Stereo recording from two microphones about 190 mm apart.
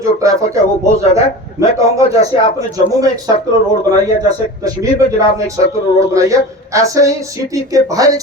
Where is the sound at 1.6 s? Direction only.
15° right (ahead or behind).